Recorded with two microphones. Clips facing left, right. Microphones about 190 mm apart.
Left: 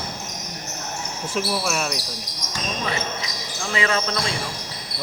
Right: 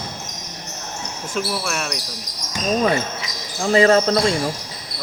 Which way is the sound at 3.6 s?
40° right (ahead or behind).